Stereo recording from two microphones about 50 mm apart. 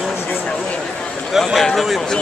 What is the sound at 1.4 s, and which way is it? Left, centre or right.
Speech, centre.